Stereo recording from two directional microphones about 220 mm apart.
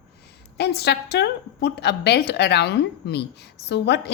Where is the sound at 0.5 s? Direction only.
50° left (ahead or behind).